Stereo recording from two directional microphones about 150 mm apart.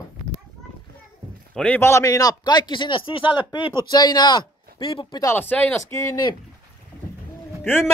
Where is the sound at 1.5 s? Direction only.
10° left (ahead or behind).